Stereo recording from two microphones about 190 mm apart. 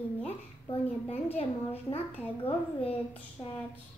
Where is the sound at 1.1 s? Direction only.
30° left (ahead or behind).